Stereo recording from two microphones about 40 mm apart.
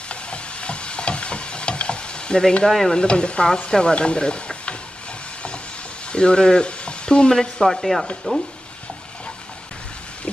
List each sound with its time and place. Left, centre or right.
0.1 s stir: left
2.9 s speech: left
6.1 s speech: left; by 8.1 s centre